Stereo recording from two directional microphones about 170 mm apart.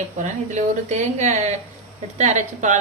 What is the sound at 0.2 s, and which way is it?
Speech, 45° right (ahead or behind).